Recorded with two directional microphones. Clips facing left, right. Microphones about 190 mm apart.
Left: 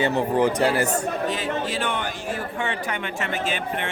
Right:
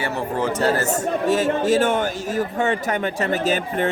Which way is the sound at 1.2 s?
45° right (ahead or behind).